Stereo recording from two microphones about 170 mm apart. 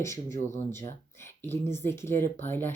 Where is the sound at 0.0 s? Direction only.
15° left (ahead or behind).